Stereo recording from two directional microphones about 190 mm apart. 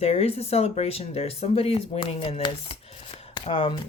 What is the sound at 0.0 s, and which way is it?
Speech, 30° left (ahead or behind).